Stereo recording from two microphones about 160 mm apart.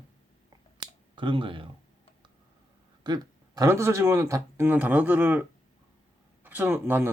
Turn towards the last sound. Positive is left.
turn(degrees=-15)  # may be behind; listen again after turning